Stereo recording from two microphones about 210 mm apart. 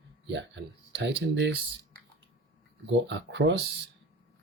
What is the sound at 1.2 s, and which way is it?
Speech, 55° right (ahead or behind).